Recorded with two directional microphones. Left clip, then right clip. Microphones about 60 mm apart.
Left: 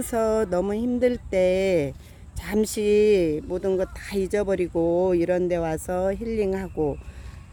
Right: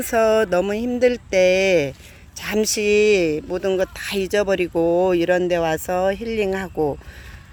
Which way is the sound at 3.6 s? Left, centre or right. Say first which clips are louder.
Right 5 dB; centre.